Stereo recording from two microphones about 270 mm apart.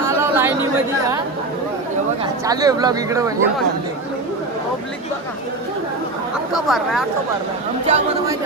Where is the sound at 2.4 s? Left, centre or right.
Centre.